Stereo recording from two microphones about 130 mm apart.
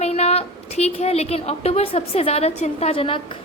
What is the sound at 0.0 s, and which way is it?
A woman's voice, 55° left (ahead or behind).